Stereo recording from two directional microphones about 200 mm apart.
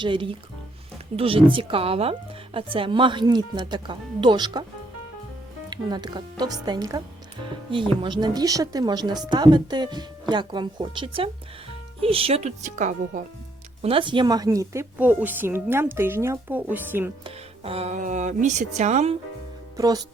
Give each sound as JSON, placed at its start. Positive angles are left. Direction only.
{"t": 0.0, "sound": "speech", "side_deg": -25}
{"t": 5.7, "sound": "speech", "side_deg": -20}
{"t": 13.8, "sound": "a woman's voice", "side_deg": -25}
{"t": 17.2, "sound": "speech", "side_deg": -30}
{"t": 19.7, "sound": "speech", "side_deg": -20}